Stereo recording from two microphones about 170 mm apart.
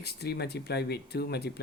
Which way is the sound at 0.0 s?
70° left (ahead or behind).